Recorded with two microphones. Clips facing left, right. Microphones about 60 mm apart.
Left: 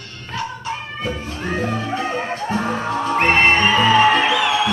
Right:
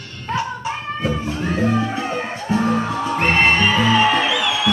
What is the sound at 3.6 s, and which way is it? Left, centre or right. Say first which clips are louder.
Music: left 2 dB; left.